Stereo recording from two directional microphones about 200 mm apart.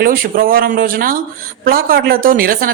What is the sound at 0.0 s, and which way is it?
Speech, 45° right (ahead or behind).